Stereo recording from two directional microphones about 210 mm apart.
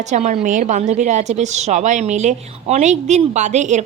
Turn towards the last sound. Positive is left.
turn(degrees=-35)  # may be behind; listen again after turning